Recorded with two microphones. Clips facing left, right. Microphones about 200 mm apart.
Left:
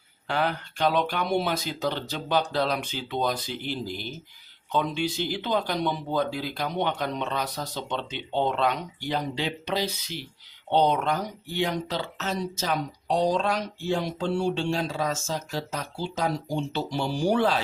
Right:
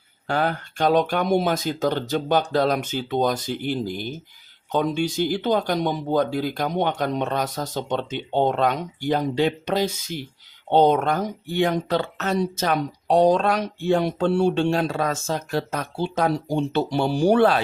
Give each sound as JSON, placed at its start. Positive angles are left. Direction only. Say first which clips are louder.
{"t": 0.3, "sound": "speech", "louder": "right 4 dB", "side_deg": -45}